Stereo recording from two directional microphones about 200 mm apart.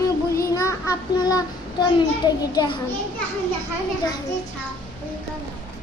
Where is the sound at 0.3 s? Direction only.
15° left (ahead or behind).